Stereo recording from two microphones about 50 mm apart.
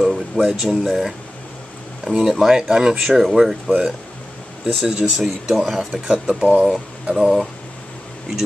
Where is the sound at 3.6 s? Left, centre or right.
Centre.